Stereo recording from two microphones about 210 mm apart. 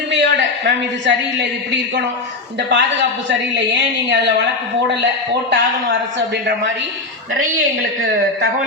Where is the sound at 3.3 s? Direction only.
60° right (ahead or behind).